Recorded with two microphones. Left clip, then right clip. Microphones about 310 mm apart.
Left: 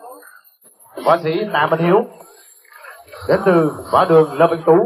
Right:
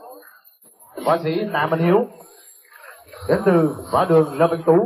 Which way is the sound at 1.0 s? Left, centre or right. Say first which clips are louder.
Left 4 dB; left.